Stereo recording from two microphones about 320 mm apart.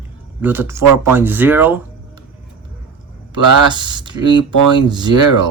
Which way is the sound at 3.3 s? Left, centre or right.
Centre.